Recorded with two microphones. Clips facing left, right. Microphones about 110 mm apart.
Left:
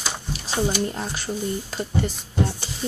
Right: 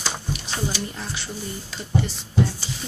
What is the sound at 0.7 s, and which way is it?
A woman's voice, 40° left (ahead or behind).